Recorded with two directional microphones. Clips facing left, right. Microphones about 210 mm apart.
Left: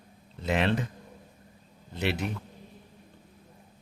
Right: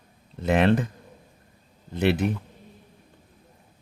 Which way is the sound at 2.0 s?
55° right (ahead or behind).